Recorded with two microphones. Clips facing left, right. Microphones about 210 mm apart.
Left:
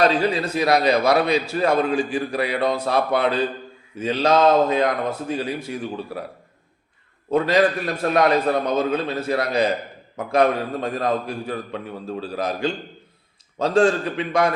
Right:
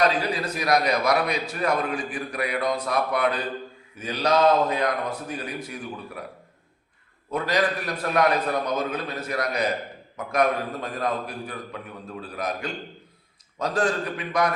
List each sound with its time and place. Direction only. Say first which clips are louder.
0.0 s a man's voice: left 4 dB; 25° left (ahead or behind)
7.3 s a man's voice: left 6 dB; 25° left (ahead or behind)